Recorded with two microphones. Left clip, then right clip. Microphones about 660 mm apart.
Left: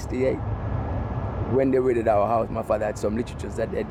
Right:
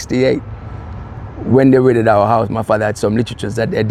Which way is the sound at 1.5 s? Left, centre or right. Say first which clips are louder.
Right 11 dB; right.